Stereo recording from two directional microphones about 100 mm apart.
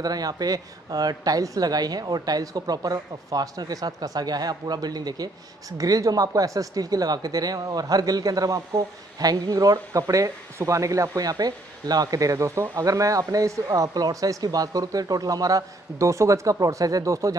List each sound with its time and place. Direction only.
0.0 s a woman's voice: 40° right (ahead or behind)